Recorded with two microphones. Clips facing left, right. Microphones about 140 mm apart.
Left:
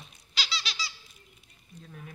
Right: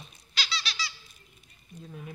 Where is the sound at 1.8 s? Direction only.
15° right (ahead or behind).